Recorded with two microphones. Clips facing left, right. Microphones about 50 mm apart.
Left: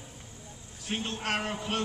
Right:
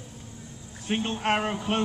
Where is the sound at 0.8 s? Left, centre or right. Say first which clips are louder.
Right 6 dB; right.